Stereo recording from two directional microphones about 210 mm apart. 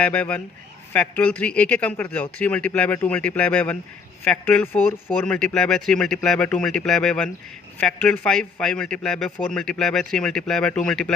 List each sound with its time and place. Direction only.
0.0 s a man's voice: 5° left (ahead or behind)